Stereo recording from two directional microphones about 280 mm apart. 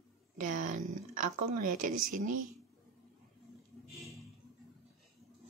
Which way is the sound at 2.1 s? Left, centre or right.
Right.